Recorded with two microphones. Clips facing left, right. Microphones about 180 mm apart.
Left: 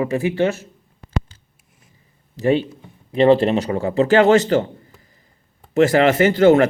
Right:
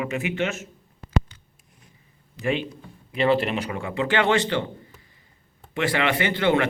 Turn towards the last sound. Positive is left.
turn(degrees=45)  # may be behind; listen again after turning